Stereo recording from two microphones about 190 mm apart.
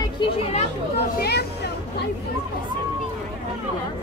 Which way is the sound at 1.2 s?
55° left (ahead or behind).